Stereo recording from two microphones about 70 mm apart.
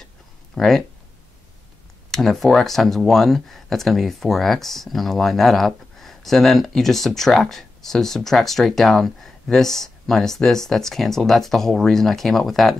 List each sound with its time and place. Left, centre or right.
0.6 s speech: centre
2.0 s speech: centre